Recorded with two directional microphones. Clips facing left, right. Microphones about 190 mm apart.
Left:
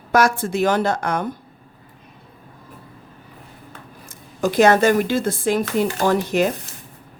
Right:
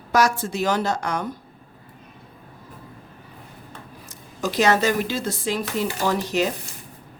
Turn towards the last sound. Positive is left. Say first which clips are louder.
# left 4 dB
turn(degrees=50)  # may be behind; listen again after turning